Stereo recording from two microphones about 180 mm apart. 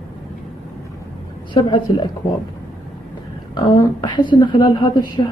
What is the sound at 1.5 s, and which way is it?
Speech, 25° left (ahead or behind).